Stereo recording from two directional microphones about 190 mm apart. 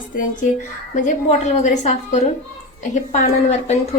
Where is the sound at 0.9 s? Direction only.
40° left (ahead or behind).